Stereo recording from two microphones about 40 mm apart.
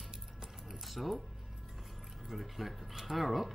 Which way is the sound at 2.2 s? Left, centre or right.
Centre.